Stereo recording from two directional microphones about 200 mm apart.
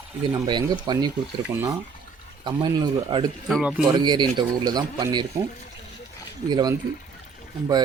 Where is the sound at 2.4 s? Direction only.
20° right (ahead or behind).